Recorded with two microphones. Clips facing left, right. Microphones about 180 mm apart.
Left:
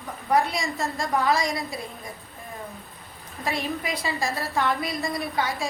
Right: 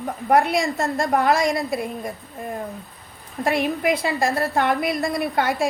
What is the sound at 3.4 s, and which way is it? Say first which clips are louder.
A woman's voice: right 8 dB; 60° right (ahead or behind).